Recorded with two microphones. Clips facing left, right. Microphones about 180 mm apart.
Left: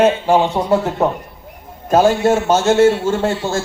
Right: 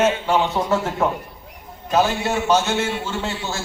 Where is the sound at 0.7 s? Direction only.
15° left (ahead or behind).